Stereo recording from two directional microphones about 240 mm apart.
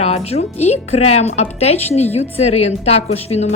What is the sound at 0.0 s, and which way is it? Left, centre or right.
A woman's voice, left.